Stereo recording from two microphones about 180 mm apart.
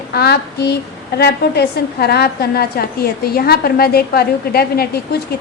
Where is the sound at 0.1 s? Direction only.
65° left (ahead or behind).